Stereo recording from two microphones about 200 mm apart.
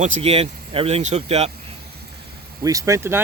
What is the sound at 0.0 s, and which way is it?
Speech, 30° right (ahead or behind).